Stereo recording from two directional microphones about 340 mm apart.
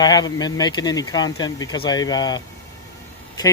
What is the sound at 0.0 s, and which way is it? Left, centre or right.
Speech, centre.